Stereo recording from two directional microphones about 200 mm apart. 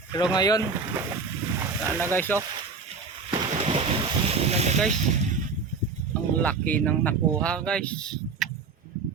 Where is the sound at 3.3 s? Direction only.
30° right (ahead or behind).